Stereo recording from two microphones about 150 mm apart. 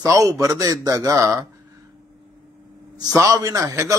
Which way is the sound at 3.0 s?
25° right (ahead or behind).